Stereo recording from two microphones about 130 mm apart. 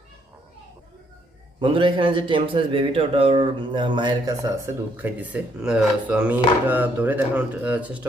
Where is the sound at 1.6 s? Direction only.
40° right (ahead or behind).